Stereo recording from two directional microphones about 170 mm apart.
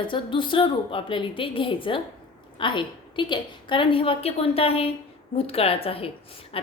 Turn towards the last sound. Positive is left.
turn(degrees=35)  # may be behind; listen again after turning